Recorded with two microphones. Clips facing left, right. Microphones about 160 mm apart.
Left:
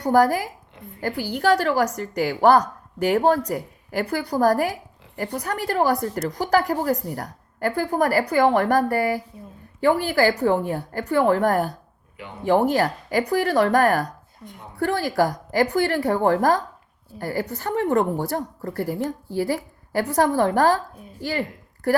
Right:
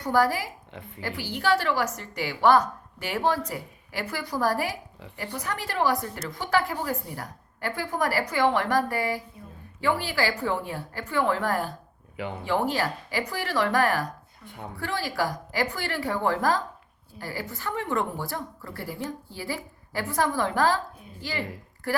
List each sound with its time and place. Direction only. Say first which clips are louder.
0.0 s a woman's voice: left 5 dB; 40° left (ahead or behind)
9.8 s a woman's voice: left 7 dB; 45° left (ahead or behind)